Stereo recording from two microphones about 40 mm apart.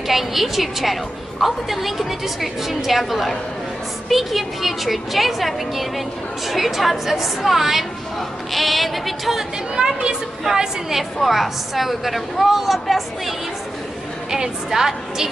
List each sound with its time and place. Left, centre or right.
0.1 s a woman's voice: centre
9.8 s a woman's voice: right
11.1 s a woman's voice: centre
14.3 s a woman's voice: centre